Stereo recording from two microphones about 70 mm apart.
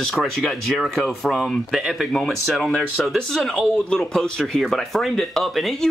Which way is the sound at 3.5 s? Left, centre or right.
Centre.